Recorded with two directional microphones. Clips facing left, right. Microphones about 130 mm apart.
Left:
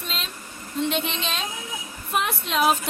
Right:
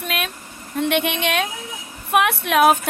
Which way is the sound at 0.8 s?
65° right (ahead or behind).